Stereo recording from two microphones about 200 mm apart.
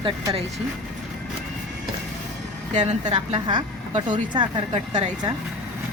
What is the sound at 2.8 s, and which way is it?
A woman's voice, 20° right (ahead or behind).